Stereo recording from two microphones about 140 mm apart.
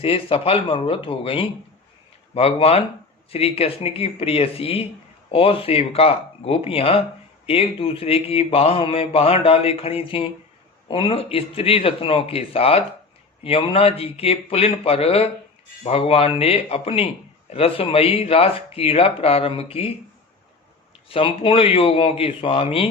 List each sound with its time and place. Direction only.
0.0 s a man's voice: 40° left (ahead or behind)
21.1 s a man's voice: 40° left (ahead or behind)